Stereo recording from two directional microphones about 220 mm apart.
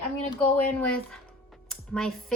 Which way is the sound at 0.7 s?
5° left (ahead or behind).